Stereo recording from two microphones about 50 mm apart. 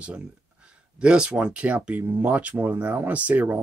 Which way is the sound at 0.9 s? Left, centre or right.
Centre.